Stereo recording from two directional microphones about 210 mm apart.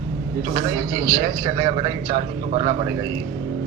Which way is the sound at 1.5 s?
25° right (ahead or behind).